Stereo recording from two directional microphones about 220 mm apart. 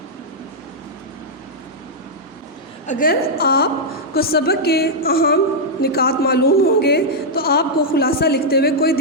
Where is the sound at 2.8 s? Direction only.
35° left (ahead or behind).